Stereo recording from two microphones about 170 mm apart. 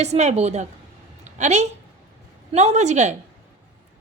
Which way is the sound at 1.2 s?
45° right (ahead or behind).